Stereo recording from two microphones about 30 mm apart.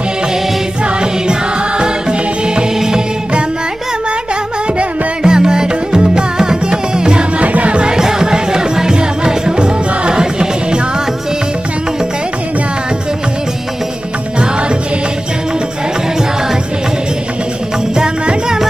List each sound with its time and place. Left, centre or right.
1.8 s music: right
5.2 s music: right
7.3 s music: right
7.8 s music: right